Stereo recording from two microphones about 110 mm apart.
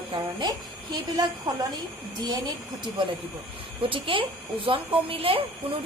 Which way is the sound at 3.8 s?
55° right (ahead or behind).